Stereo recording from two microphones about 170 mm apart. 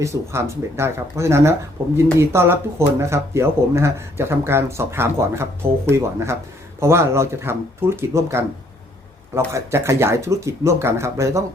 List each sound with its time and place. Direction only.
0.0 s speech: 15° right (ahead or behind)
9.5 s speech: 15° right (ahead or behind)